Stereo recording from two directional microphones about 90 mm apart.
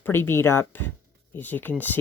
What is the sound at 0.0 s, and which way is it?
Speech, 25° left (ahead or behind).